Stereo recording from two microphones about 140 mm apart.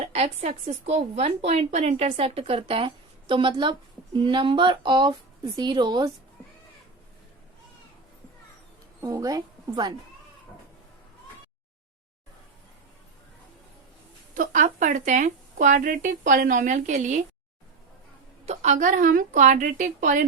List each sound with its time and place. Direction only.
0.0 s a woman's voice: 50° right (ahead or behind); by 6.1 s 30° right (ahead or behind)
9.0 s a woman's voice: 25° right (ahead or behind)
14.3 s speech: 70° right (ahead or behind)
18.4 s speech: 60° right (ahead or behind)